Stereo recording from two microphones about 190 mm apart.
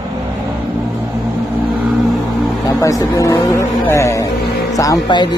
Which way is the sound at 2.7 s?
20° left (ahead or behind).